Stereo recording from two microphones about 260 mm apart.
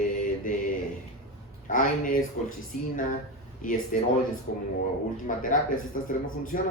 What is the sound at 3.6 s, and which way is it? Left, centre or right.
Speech, left.